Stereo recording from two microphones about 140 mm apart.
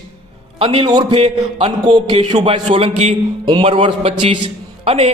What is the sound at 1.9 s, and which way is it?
A man's voice, 35° right (ahead or behind).